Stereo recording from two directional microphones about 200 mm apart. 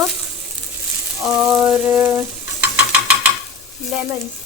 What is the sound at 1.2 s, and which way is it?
A woman's voice, 5° right (ahead or behind).